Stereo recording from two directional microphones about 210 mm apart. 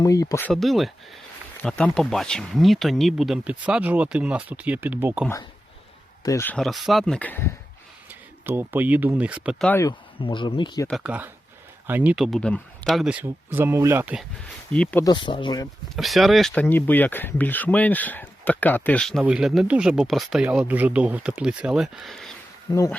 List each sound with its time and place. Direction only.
0.0 s speech: 15° left (ahead or behind); by 5.3 s 5° right (ahead or behind)
6.2 s speech: 10° left (ahead or behind)
8.4 s speech: 10° right (ahead or behind)
9.6 s speech: 10° left (ahead or behind)
10.2 s speech: 25° left (ahead or behind)
10.8 s speech: 5° right (ahead or behind)
14.7 s speech: 5° left (ahead or behind)
15.0 s speech: 20° left (ahead or behind)
16.0 s speech: centre (ahead or behind)
22.7 s speech: 15° left (ahead or behind)